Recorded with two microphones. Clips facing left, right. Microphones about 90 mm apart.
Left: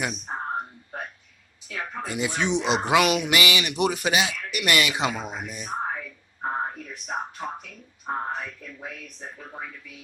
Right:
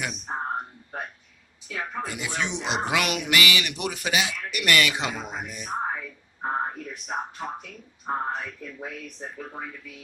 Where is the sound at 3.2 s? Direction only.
20° left (ahead or behind).